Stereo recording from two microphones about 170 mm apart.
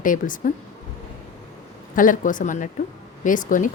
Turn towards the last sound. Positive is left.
turn(degrees=50)  # may be behind; listen again after turning